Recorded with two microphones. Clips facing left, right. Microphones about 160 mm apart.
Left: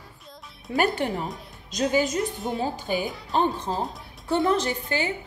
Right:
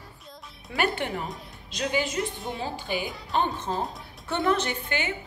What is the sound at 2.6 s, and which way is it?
A woman's voice, 45° left (ahead or behind).